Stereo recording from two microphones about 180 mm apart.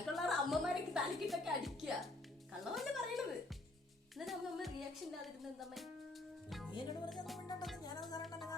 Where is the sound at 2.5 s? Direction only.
Centre (ahead or behind).